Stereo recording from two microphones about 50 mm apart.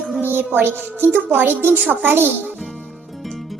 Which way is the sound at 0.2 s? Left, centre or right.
Right.